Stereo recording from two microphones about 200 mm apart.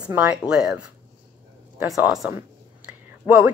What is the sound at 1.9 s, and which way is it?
A woman's voice, 5° right (ahead or behind).